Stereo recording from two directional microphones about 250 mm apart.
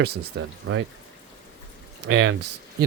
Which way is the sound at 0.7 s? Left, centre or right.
Right.